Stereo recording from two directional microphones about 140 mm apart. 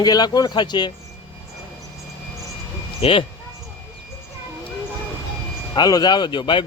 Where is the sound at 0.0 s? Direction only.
30° left (ahead or behind).